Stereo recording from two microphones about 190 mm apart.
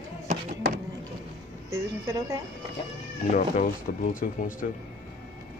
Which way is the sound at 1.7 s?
15° right (ahead or behind).